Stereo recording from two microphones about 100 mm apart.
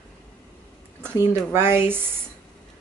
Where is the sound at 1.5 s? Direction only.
25° right (ahead or behind).